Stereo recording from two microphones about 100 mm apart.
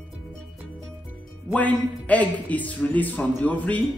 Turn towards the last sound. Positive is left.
turn(degrees=15)  # may be behind; listen again after turning